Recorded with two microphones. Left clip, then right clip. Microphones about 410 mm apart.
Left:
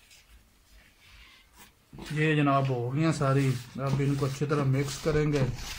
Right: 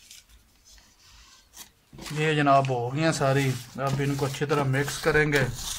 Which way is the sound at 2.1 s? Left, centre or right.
Right.